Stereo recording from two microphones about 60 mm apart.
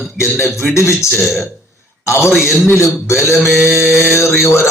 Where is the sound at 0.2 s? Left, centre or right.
Left.